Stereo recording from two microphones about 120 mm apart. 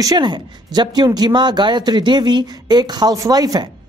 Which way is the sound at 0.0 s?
35° right (ahead or behind).